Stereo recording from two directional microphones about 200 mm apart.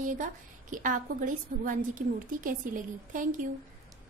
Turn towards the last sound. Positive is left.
turn(degrees=-40)  # may be behind; listen again after turning